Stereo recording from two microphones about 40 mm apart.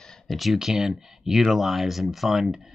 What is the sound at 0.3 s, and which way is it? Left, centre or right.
Speech, centre.